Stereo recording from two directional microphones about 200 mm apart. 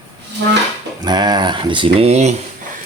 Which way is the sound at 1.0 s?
20° right (ahead or behind).